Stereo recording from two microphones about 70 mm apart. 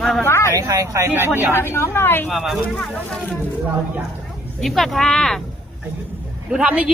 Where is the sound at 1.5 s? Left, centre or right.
Left.